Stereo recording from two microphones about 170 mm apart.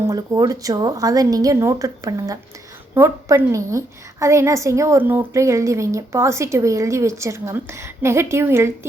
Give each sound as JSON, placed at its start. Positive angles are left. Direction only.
{"t": 0.1, "sound": "a woman's voice", "side_deg": -20}